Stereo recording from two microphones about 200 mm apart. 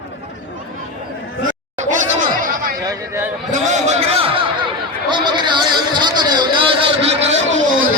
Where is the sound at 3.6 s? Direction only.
35° right (ahead or behind).